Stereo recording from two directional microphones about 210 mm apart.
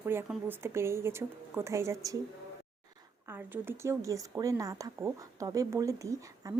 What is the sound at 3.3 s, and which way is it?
A woman's voice, 10° right (ahead or behind).